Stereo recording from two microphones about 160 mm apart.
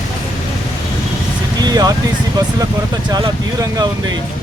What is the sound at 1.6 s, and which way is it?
Speech, 25° right (ahead or behind).